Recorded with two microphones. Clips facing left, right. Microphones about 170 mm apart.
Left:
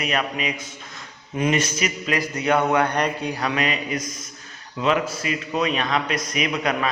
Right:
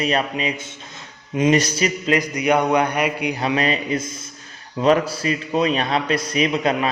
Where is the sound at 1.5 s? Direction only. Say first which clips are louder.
Right 5 dB; 35° right (ahead or behind).